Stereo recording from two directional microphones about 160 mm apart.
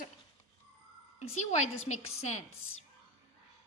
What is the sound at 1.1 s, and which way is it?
A woman's voice, 45° left (ahead or behind).